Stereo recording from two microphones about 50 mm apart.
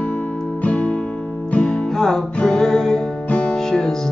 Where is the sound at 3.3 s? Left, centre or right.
Left.